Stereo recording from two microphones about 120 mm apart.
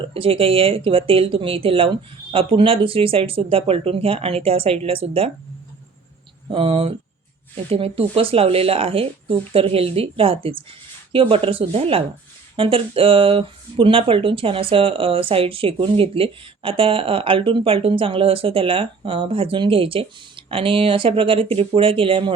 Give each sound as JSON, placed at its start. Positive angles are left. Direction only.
{"t": 0.0, "sound": "speech", "side_deg": -50}
{"t": 6.5, "sound": "speech", "side_deg": -50}